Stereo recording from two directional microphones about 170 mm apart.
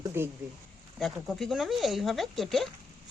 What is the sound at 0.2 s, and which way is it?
Speech, 15° right (ahead or behind).